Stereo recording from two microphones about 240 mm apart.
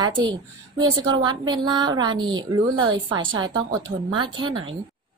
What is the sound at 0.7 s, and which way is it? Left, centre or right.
A woman's voice, centre.